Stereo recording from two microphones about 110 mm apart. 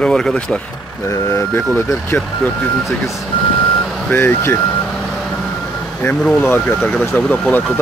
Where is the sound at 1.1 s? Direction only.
25° left (ahead or behind).